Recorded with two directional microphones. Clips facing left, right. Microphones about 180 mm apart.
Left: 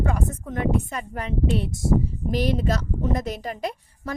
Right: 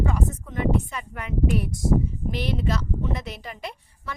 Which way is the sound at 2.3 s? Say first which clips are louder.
Left 4 dB; 40° left (ahead or behind).